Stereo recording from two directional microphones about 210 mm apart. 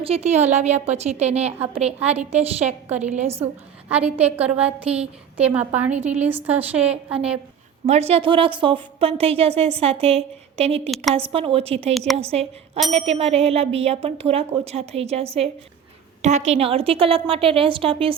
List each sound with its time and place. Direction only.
0.0 s a woman's voice: 30° right (ahead or behind)
3.8 s a woman's voice: 5° right (ahead or behind)
7.9 s a woman's voice: 30° right (ahead or behind)